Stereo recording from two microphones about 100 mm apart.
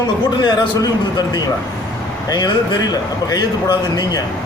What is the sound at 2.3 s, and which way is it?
A man's voice, 45° left (ahead or behind).